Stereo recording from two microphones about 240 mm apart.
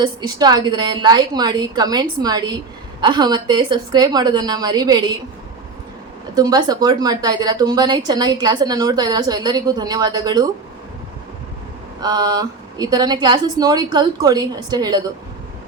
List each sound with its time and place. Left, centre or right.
0.0 s a woman's voice: centre
6.3 s a woman's voice: centre
11.9 s a woman's voice: centre